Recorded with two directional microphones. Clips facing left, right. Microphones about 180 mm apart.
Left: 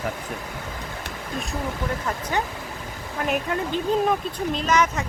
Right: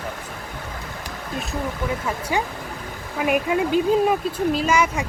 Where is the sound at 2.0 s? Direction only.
10° right (ahead or behind).